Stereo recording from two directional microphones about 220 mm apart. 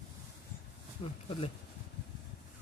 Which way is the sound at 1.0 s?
25° left (ahead or behind).